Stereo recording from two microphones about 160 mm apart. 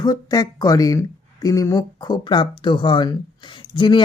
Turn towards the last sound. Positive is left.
turn(degrees=30)  # may be behind; listen again after turning